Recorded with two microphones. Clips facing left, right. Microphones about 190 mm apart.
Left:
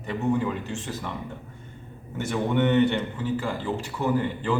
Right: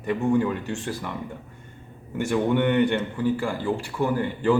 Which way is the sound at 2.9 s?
10° right (ahead or behind).